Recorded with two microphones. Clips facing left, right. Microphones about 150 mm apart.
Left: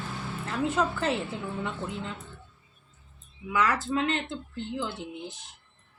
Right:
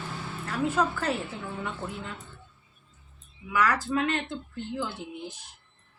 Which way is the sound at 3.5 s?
25° left (ahead or behind).